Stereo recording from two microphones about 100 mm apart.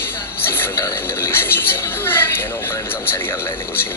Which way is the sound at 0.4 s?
25° left (ahead or behind).